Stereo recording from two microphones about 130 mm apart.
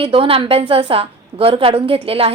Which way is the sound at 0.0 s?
45° right (ahead or behind).